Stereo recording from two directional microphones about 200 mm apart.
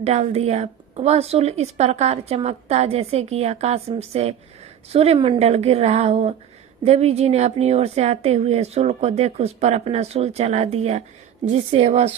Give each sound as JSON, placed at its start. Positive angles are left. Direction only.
{"t": 0.0, "sound": "a woman's voice", "side_deg": -30}